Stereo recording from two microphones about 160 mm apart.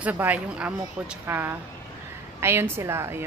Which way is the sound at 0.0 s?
10° right (ahead or behind).